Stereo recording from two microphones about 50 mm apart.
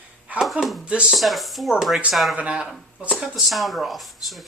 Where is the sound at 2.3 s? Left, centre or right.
Right.